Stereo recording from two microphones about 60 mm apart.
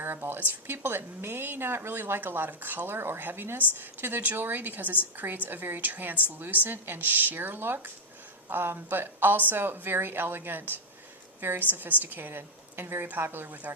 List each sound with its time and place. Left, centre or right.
0.0 s a woman's voice: right